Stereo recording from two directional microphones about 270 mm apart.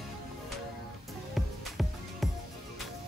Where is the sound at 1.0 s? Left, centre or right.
Centre.